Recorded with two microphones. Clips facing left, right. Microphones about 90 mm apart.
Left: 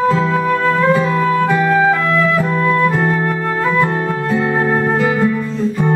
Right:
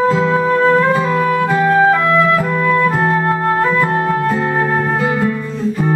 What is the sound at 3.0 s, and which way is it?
Music, 30° right (ahead or behind).